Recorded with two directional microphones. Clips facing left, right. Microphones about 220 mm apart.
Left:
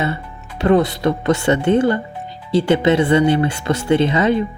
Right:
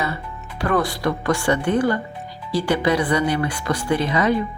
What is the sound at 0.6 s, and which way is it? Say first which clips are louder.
Speech: left 6 dB; 25° left (ahead or behind).